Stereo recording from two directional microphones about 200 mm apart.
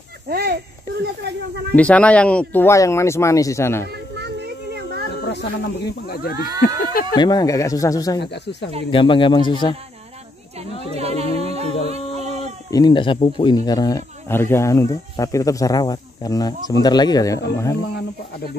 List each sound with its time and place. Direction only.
0.3 s a sound: 50° right (ahead or behind)
1.8 s speech: 5° left (ahead or behind)
5.1 s speech: 55° left (ahead or behind)
6.3 s speech: 20° right (ahead or behind)
6.6 s speech: 45° left (ahead or behind)
7.2 s speech: 20° left (ahead or behind)
8.2 s speech: 60° left (ahead or behind)
8.9 s speech: 25° left (ahead or behind)
10.9 s a sound: 30° right (ahead or behind)
12.7 s speech: 20° left (ahead or behind)